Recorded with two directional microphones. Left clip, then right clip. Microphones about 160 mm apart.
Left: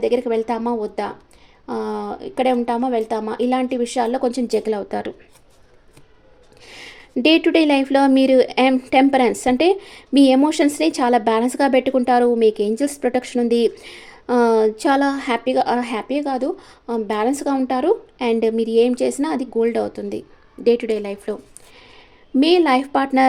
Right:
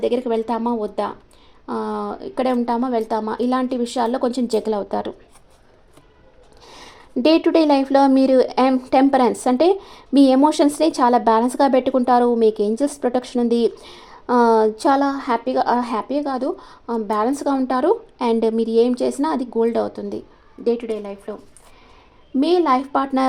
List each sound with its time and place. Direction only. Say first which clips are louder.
0.0 s speech: left 1 dB; centre (ahead or behind)
6.7 s a woman's voice: left 3 dB; 5° left (ahead or behind)
20.7 s speech: left 4 dB; 25° left (ahead or behind)
22.4 s speech: left 2 dB; 20° left (ahead or behind)